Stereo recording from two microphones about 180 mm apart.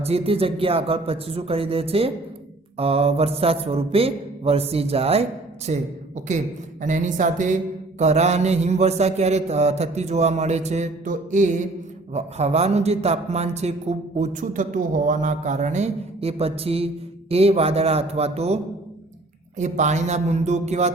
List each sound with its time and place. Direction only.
0.0 s speech: 35° right (ahead or behind)
6.8 s speech: 45° right (ahead or behind)